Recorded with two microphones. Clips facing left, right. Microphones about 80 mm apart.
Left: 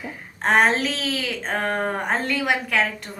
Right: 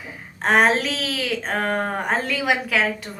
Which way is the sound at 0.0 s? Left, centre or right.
Centre.